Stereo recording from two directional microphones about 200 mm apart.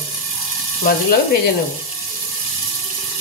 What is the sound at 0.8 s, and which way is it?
Speech, 50° left (ahead or behind).